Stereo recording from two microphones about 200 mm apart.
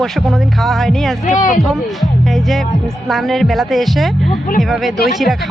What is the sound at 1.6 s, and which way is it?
Speech, centre (ahead or behind).